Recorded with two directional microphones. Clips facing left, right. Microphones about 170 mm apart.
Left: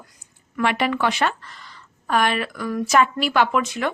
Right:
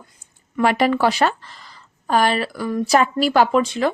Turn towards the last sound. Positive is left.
turn(degrees=-30)  # may be behind; listen again after turning